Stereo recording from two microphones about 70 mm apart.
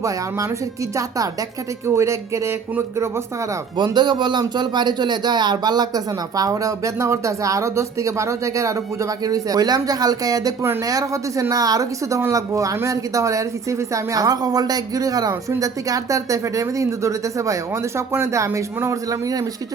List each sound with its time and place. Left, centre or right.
0.0 s a woman's voice: right
2.0 s a woman's voice: right
3.9 s a woman's voice: right